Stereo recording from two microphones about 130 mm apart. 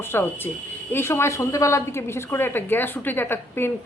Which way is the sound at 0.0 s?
15° left (ahead or behind).